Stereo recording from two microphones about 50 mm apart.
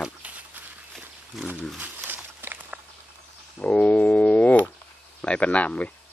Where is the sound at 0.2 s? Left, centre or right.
Right.